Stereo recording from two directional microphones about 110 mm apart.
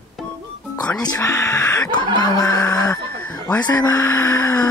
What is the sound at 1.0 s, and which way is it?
Speech, 30° left (ahead or behind).